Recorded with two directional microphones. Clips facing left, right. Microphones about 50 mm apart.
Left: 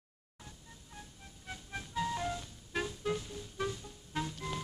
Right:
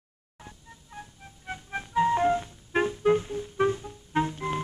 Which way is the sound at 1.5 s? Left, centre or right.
Right.